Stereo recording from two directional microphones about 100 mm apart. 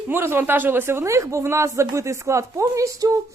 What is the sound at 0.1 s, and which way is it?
Speech, 25° right (ahead or behind).